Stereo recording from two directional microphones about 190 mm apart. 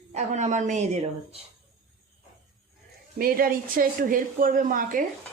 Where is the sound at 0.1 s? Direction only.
40° right (ahead or behind).